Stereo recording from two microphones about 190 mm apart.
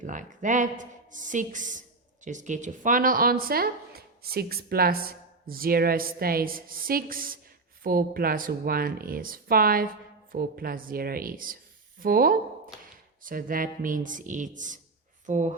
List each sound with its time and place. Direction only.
0.0 s speech: 40° right (ahead or behind)